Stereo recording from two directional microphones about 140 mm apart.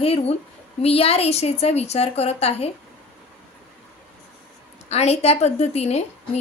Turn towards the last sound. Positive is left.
turn(degrees=50)  # may be behind; listen again after turning